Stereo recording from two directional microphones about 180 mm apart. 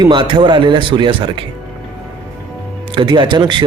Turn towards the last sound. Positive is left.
turn(degrees=-25)  # may be behind; listen again after turning